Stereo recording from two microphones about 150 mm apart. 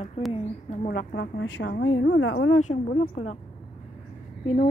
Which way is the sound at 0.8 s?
80° left.